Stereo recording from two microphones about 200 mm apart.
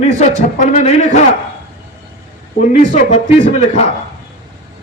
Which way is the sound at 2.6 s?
35° left (ahead or behind).